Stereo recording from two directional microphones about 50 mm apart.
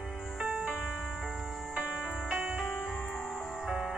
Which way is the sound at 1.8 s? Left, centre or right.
Right.